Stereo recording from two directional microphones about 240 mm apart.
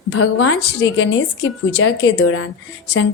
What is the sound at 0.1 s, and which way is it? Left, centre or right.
A woman's voice, left.